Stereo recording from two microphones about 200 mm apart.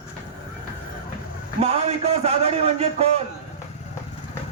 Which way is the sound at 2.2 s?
30° right (ahead or behind).